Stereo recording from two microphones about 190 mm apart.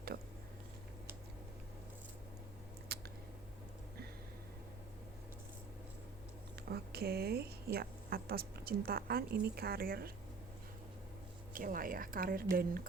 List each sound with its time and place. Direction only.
2.9 s a sound: 55° right (ahead or behind)
6.7 s a woman's voice: 55° right (ahead or behind)
11.5 s a woman's voice: 50° right (ahead or behind)